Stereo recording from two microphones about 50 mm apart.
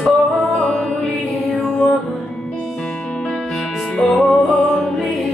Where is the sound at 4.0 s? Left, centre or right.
Centre.